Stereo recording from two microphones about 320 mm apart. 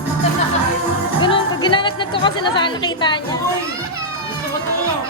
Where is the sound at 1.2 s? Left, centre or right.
Centre.